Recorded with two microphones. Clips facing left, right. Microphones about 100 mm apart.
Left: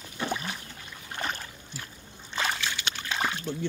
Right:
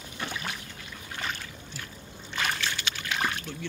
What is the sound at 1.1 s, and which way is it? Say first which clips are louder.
Boat: left 2 dB; 35° left (ahead or behind).